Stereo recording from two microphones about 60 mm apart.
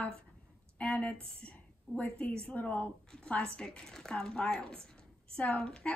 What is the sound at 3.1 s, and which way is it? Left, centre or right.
Speech, centre.